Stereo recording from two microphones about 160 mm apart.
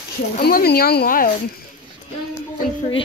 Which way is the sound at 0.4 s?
75° left (ahead or behind).